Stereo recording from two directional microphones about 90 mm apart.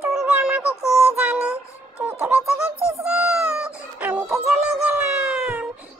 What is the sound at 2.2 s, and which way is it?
Speech, 10° right (ahead or behind).